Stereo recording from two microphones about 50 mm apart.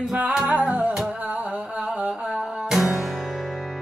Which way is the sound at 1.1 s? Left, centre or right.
Right.